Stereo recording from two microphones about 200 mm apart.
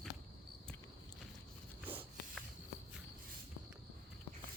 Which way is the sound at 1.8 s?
10° right (ahead or behind).